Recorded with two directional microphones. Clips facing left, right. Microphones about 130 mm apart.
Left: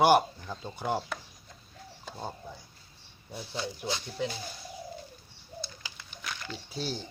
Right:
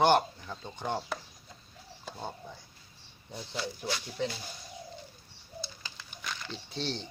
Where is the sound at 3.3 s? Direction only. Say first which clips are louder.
Left 1 dB; 5° left (ahead or behind).